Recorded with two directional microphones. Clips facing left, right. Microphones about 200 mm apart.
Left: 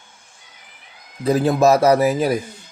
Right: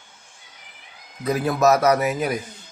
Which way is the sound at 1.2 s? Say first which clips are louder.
Left 4 dB; 30° left (ahead or behind).